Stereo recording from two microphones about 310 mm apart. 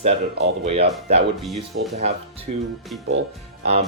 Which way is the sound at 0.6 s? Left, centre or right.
Centre.